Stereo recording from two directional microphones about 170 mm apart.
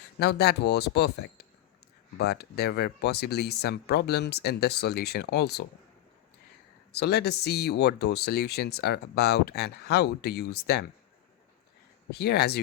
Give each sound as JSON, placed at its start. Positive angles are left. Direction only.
{"t": 0.2, "sound": "speech", "side_deg": 70}
{"t": 6.9, "sound": "speech", "side_deg": 70}
{"t": 12.1, "sound": "speech", "side_deg": 75}